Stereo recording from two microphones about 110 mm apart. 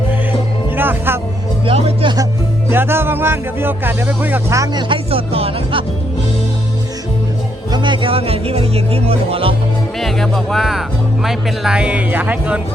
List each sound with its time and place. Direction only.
0.8 s speech: 20° right (ahead or behind)
1.6 s music: 55° right (ahead or behind)
2.6 s speech: 20° right (ahead or behind)
4.5 s speech: 35° right (ahead or behind); by 5.8 s 60° right (ahead or behind)
7.7 s speech: 45° right (ahead or behind)
10.0 s speech: centre (ahead or behind); by 12.5 s 15° right (ahead or behind)